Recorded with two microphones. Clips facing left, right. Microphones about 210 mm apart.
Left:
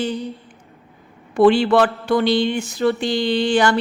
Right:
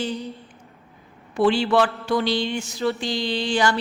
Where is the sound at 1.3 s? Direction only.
55° left (ahead or behind).